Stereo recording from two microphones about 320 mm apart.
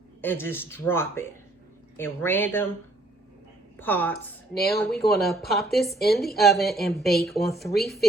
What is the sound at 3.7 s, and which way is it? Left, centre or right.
A woman's voice, centre.